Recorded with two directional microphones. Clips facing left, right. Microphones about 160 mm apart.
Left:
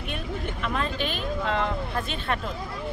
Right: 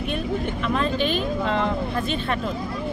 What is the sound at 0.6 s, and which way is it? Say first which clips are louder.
Speech: right 5 dB; 25° right (ahead or behind).